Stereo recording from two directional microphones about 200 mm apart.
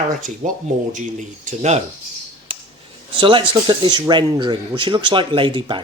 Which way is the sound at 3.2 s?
25° right (ahead or behind).